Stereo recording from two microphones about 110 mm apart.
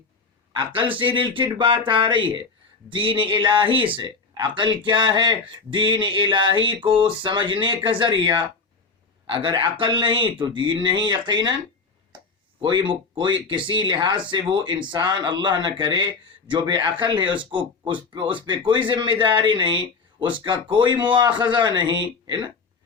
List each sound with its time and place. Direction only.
0.5 s speech: 50° right (ahead or behind)
12.6 s speech: 45° right (ahead or behind)